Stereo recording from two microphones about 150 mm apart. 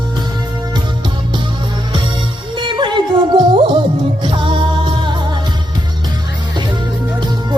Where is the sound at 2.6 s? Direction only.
30° right (ahead or behind).